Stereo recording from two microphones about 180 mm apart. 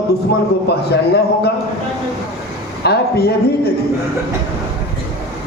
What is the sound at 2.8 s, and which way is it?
Speech, 65° left (ahead or behind).